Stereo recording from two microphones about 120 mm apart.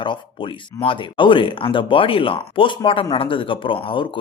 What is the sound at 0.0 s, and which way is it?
Speech, 45° left (ahead or behind).